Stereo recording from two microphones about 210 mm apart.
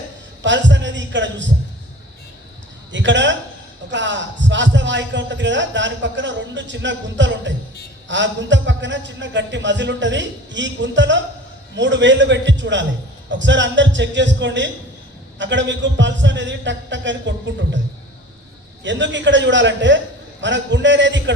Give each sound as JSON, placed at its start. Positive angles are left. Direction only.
{"t": 0.4, "sound": "a man's voice", "side_deg": -60}
{"t": 2.9, "sound": "a man's voice", "side_deg": -60}
{"t": 18.8, "sound": "a man's voice", "side_deg": -60}